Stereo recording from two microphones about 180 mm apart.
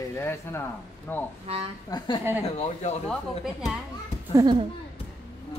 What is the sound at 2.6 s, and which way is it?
Speech, 40° left (ahead or behind).